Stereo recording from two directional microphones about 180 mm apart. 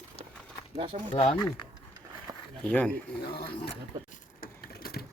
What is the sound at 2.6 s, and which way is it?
Speech, 10° left (ahead or behind).